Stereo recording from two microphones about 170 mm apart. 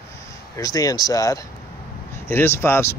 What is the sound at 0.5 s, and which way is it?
Speech, 20° left (ahead or behind).